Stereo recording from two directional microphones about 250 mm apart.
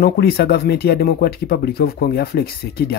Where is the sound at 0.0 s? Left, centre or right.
Left.